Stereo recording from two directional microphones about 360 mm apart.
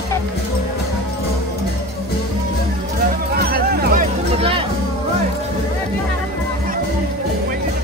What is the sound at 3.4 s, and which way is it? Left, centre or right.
Music, right.